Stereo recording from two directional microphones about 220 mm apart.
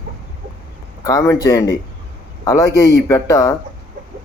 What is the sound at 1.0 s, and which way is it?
Speech, 15° left (ahead or behind).